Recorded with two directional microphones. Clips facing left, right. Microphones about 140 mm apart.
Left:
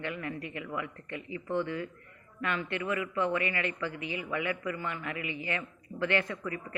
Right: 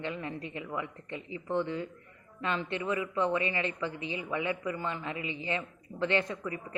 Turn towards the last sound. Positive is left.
turn(degrees=-20)  # may be behind; listen again after turning